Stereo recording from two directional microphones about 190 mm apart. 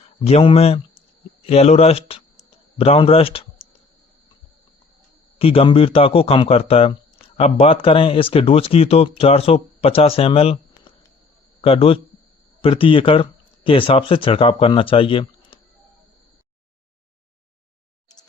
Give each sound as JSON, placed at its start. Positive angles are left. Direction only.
{"t": 0.3, "sound": "speech", "side_deg": 30}
{"t": 5.4, "sound": "speech", "side_deg": 30}